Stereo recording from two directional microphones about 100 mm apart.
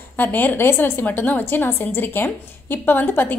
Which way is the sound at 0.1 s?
20° left (ahead or behind).